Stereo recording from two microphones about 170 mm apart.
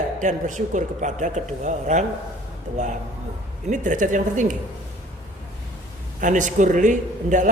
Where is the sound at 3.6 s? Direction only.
50° right (ahead or behind).